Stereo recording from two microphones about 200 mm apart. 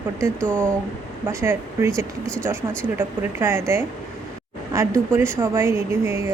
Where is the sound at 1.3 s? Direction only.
15° right (ahead or behind).